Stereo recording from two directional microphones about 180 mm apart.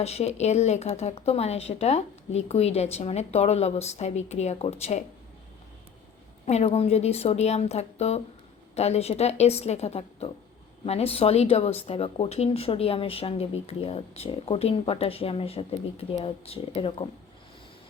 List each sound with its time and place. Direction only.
0.0 s speech: 35° left (ahead or behind)
6.4 s speech: 35° left (ahead or behind)